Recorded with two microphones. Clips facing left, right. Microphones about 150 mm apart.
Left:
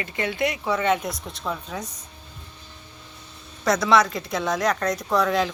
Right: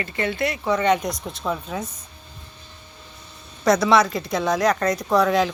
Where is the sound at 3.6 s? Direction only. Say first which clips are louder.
Right 2 dB; centre (ahead or behind).